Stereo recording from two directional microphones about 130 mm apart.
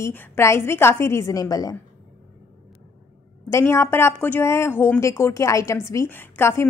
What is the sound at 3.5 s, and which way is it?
A woman's voice, 20° left (ahead or behind).